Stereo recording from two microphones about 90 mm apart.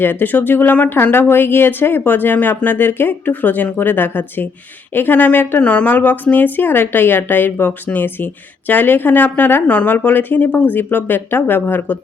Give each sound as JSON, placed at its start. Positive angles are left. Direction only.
{"t": 0.0, "sound": "speech", "side_deg": 20}